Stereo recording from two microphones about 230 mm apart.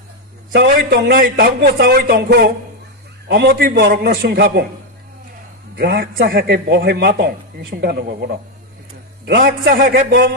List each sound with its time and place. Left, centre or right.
0.6 s a man's voice: right
5.8 s a man's voice: right